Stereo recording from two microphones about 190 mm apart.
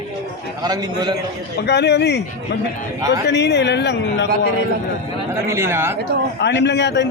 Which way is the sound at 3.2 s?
65° left (ahead or behind).